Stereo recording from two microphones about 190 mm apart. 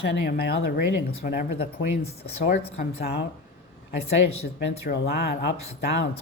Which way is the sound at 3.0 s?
60° left (ahead or behind).